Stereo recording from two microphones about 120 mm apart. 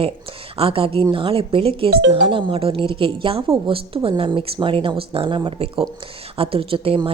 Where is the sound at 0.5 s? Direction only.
50° right (ahead or behind).